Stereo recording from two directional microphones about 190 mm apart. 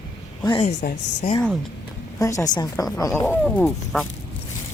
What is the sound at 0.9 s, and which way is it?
Speech, 60° left (ahead or behind).